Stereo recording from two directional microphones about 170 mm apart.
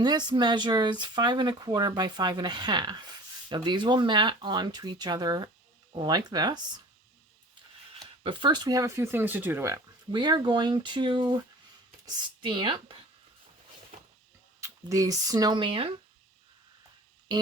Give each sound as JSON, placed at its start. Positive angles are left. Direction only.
{"t": 0.0, "sound": "speech", "side_deg": -25}
{"t": 8.2, "sound": "speech", "side_deg": -30}
{"t": 14.6, "sound": "speech", "side_deg": -20}